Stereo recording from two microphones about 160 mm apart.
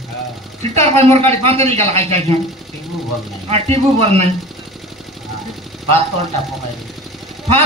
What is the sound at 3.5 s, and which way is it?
Speech, 40° right (ahead or behind).